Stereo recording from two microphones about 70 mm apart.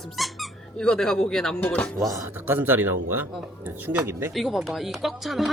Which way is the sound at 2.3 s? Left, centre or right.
Right.